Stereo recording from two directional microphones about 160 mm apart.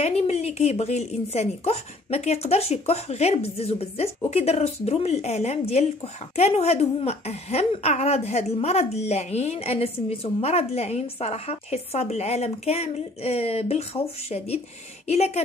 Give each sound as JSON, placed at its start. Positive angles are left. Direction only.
{"t": 0.0, "sound": "a woman's voice", "side_deg": 40}